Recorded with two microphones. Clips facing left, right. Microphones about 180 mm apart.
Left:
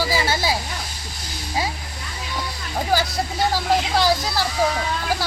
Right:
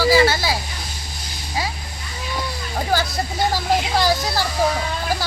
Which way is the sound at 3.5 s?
Centre (ahead or behind).